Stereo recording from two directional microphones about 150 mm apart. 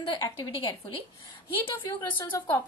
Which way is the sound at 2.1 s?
15° left (ahead or behind).